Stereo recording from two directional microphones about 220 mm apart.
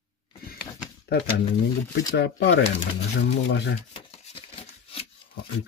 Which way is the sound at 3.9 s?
25° left (ahead or behind).